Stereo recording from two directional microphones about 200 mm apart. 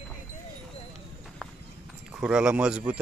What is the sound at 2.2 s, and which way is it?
Speech, 5° right (ahead or behind).